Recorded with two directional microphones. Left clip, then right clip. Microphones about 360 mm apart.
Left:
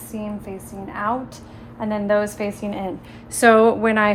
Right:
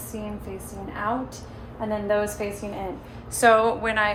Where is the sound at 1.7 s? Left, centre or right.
Centre.